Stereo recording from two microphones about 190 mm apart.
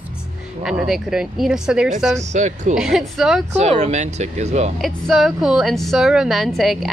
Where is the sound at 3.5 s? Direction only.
35° right (ahead or behind).